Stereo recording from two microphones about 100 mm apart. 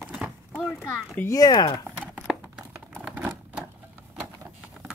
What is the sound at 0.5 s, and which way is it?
Speech, 20° left (ahead or behind).